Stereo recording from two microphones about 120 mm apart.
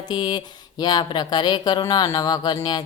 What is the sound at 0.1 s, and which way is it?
Speech, 40° left (ahead or behind).